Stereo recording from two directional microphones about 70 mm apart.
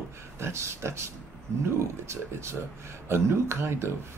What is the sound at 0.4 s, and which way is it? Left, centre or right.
Speech, right.